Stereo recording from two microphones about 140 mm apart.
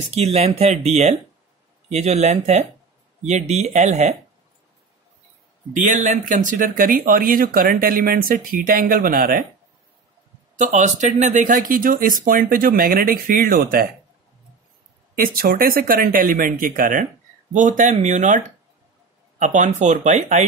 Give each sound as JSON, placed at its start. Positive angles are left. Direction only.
{"t": 0.1, "sound": "speech", "side_deg": -50}
{"t": 1.9, "sound": "speech", "side_deg": -50}
{"t": 5.7, "sound": "speech", "side_deg": -60}
{"t": 10.6, "sound": "speech", "side_deg": -60}
{"t": 15.1, "sound": "speech", "side_deg": -90}
{"t": 17.6, "sound": "speech", "side_deg": -60}